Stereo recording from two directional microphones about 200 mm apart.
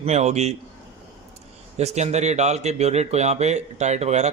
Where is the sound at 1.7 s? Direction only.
35° right (ahead or behind).